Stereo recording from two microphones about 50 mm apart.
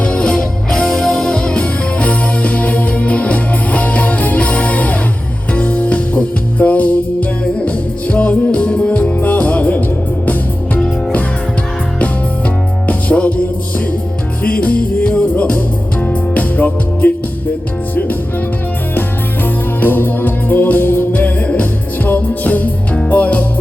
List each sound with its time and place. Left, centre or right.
0.0 s music: centre
12.9 s music: left
19.8 s music: left
21.2 s music: left